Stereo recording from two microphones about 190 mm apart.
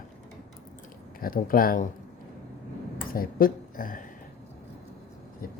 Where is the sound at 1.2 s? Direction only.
50° left (ahead or behind).